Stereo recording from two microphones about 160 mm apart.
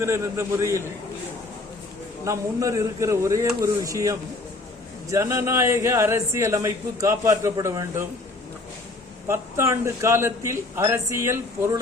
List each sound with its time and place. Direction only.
0.0 s speech: 15° right (ahead or behind)
2.2 s speech: 20° right (ahead or behind)
9.2 s speech: 15° right (ahead or behind)